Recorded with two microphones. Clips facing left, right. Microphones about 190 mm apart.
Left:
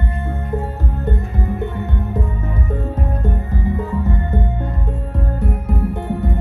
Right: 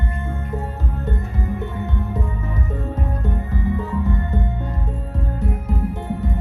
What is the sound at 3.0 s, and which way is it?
Music, 50° left (ahead or behind).